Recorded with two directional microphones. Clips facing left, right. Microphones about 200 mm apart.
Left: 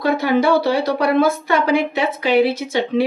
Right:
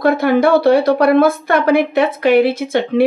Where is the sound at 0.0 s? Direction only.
55° right (ahead or behind).